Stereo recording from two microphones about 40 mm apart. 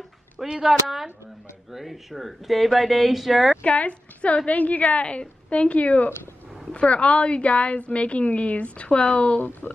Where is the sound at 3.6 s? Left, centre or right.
Left.